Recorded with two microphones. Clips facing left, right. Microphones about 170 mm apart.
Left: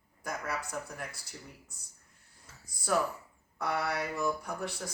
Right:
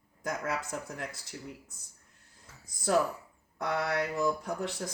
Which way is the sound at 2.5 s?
20° right (ahead or behind).